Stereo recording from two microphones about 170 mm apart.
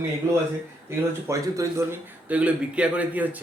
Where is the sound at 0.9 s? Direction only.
20° right (ahead or behind).